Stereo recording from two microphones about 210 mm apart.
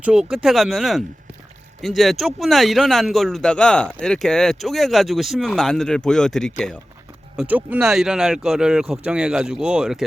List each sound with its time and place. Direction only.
0.0 s speech: 5° right (ahead or behind)